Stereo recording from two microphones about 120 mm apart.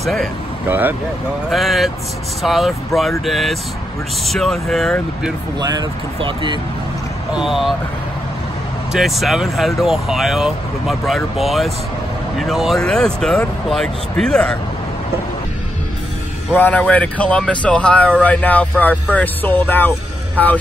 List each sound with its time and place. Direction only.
0.0 s speech: centre (ahead or behind)
0.7 s speech: 15° right (ahead or behind)
1.5 s speech: centre (ahead or behind)
5.6 s speech: 35° right (ahead or behind)
7.3 s speech: centre (ahead or behind)
8.9 s speech: centre (ahead or behind)
16.5 s speech: 15° left (ahead or behind)